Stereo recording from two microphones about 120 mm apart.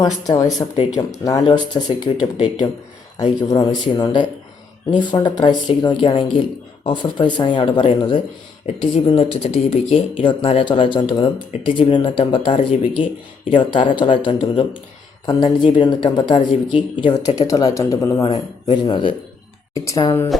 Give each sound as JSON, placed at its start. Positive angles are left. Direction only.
{"t": 0.0, "sound": "speech", "side_deg": 30}
{"t": 3.2, "sound": "speech", "side_deg": 30}
{"t": 19.7, "sound": "speech", "side_deg": 25}
{"t": 20.3, "sound": "music", "side_deg": 0}